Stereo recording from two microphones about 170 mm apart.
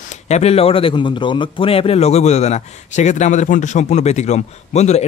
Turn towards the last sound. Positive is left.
turn(degrees=40)  # may be behind; listen again after turning